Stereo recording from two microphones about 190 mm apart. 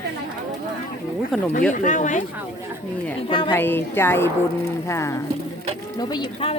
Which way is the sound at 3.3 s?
25° left (ahead or behind).